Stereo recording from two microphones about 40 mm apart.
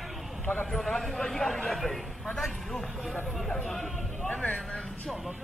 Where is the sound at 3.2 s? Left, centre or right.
Centre.